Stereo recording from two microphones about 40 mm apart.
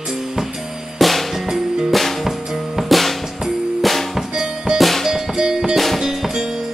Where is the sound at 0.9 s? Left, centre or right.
Centre.